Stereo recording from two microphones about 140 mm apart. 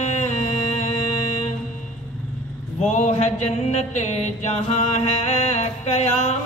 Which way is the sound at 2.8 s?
55° left (ahead or behind).